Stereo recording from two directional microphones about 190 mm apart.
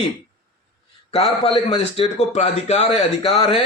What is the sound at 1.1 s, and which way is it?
A man's voice, 30° left (ahead or behind).